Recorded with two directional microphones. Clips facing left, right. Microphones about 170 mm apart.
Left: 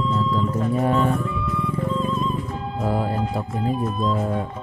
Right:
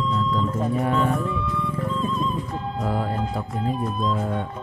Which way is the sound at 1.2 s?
Centre (ahead or behind).